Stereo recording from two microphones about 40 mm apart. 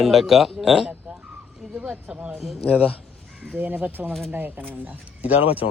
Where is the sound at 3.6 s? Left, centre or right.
Right.